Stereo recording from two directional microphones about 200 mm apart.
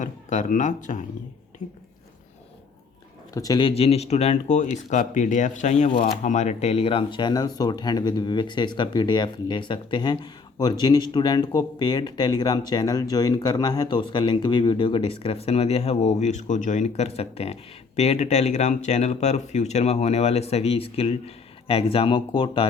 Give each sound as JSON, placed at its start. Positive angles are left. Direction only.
{"t": 0.0, "sound": "speech", "side_deg": 40}
{"t": 3.3, "sound": "speech", "side_deg": 20}